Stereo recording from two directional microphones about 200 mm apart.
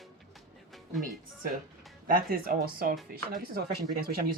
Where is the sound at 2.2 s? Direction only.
50° right (ahead or behind).